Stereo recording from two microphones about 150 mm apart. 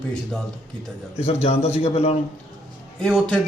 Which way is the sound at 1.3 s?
45° left (ahead or behind).